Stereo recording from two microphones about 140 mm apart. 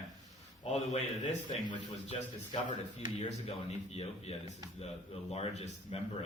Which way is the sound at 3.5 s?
50° left (ahead or behind).